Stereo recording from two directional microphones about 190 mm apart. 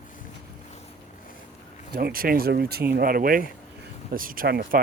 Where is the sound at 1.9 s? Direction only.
50° right (ahead or behind).